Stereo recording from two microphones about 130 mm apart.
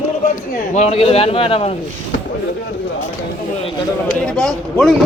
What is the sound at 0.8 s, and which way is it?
Speech, 50° left (ahead or behind).